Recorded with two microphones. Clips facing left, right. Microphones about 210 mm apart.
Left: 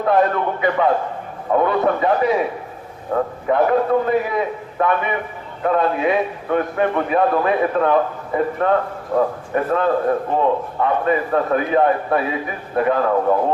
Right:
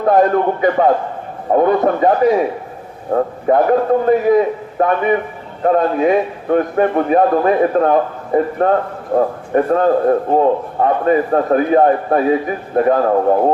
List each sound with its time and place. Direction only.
0.0 s a man's voice: 45° right (ahead or behind)